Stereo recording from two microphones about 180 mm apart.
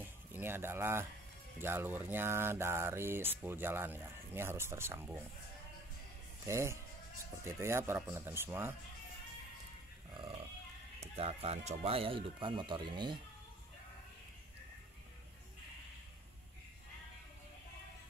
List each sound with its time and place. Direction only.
0.0 s a sound: 10° right (ahead or behind)
1.6 s speech: 10° right (ahead or behind)
6.4 s speech: 15° right (ahead or behind)
11.0 s speech: 35° right (ahead or behind)